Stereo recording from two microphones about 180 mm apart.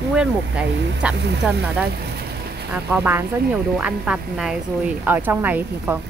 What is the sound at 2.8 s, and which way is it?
A woman's voice, 10° right (ahead or behind).